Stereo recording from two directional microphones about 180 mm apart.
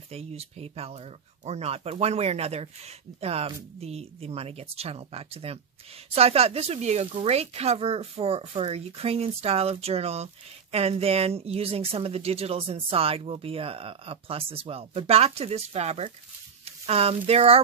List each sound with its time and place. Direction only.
0.1 s speech: 35° right (ahead or behind)